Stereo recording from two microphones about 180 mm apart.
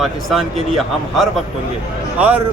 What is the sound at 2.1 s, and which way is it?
Speech, 10° right (ahead or behind).